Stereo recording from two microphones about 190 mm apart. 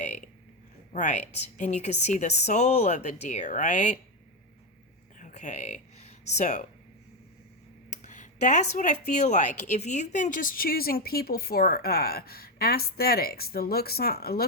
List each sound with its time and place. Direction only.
0.9 s speech: 40° left (ahead or behind)
5.2 s a sound: 40° left (ahead or behind)
7.9 s speech: 40° left (ahead or behind)